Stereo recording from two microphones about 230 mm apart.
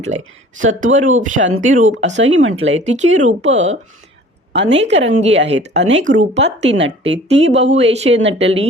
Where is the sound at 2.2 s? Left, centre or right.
Right.